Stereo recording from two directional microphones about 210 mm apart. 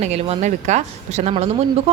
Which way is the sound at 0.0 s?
30° right (ahead or behind).